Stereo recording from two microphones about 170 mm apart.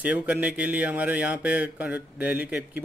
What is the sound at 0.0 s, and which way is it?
Speech, 10° right (ahead or behind).